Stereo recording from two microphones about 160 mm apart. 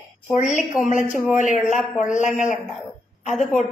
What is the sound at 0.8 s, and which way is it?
A woman's voice, 50° left (ahead or behind).